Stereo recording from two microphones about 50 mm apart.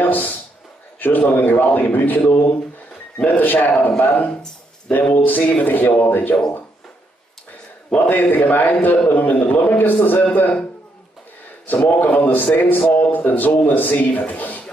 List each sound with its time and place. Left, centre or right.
0.0 s a sound: left
0.9 s a man's voice: left
4.3 s a sound: left
5.1 s a man's voice: left
7.9 s a man's voice: left
11.6 s a man's voice: left